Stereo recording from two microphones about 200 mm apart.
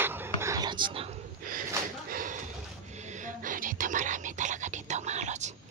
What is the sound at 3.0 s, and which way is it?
Whispering, 40° right (ahead or behind).